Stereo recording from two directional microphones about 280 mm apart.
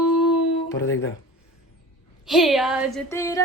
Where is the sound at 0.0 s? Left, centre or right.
Centre.